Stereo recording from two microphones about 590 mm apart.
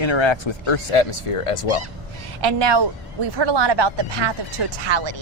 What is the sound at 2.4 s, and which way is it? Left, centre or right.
A woman's voice, right.